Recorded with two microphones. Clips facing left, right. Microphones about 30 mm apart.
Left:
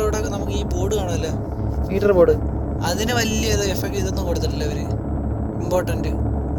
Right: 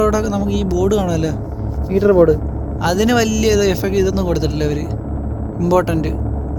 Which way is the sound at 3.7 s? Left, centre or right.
Centre.